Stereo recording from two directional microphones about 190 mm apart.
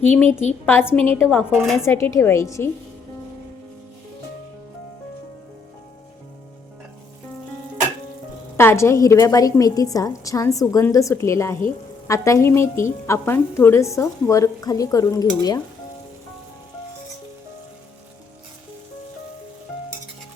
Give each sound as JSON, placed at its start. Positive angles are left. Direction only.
{"t": 0.0, "sound": "a woman's voice", "side_deg": 10}
{"t": 8.5, "sound": "a woman's voice", "side_deg": 15}